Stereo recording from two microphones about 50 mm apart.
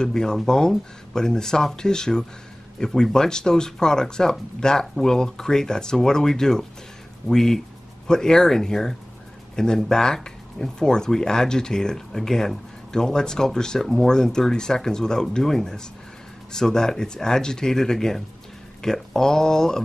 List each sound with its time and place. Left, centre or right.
0.0 s speech: centre